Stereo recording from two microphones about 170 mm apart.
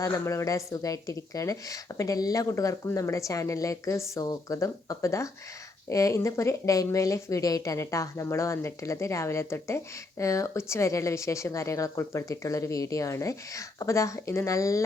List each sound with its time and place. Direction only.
0.0 s a woman's voice: 20° left (ahead or behind)